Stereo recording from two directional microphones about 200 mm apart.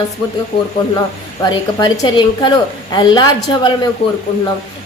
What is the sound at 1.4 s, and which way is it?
A woman's voice, 25° left (ahead or behind).